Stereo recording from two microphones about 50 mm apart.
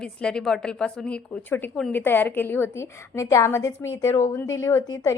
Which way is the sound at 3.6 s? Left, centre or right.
Left.